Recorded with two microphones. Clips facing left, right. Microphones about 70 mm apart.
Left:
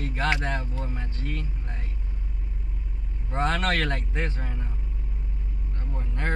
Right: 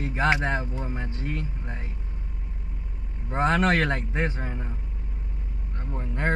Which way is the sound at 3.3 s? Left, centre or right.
Centre.